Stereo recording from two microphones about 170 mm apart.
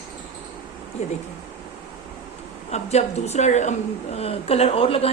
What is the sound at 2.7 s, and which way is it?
Speech, 40° left (ahead or behind).